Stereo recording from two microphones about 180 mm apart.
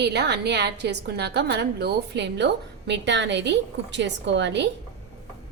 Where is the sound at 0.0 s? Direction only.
65° right (ahead or behind).